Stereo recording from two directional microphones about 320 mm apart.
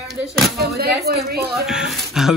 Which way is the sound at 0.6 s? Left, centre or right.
Right.